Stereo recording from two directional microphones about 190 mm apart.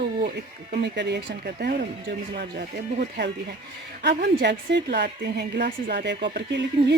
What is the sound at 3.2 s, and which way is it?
A woman's voice, 60° right (ahead or behind).